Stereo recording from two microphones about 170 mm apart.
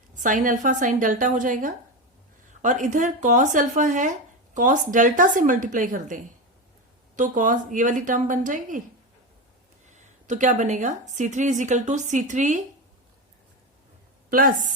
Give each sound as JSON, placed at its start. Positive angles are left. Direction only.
{"t": 0.1, "sound": "a woman's voice", "side_deg": -50}
{"t": 9.8, "sound": "a woman's voice", "side_deg": -45}
{"t": 14.3, "sound": "a woman's voice", "side_deg": -55}